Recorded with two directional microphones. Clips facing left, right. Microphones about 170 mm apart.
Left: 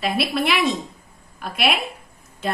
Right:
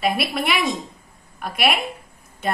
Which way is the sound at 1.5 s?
55° right (ahead or behind).